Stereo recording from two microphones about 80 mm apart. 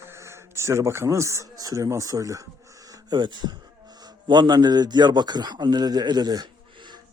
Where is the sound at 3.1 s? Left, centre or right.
Right.